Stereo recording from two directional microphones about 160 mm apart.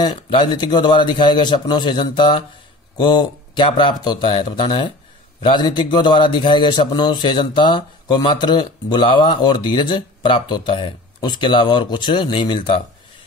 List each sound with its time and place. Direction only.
0.0 s a man's voice: 30° left (ahead or behind)